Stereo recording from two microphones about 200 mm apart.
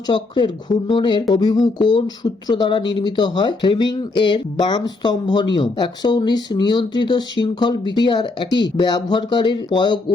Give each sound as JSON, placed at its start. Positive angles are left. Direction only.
{"t": 0.1, "sound": "speech", "side_deg": 25}